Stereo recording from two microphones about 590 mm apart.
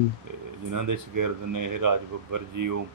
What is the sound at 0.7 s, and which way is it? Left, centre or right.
Speech, right.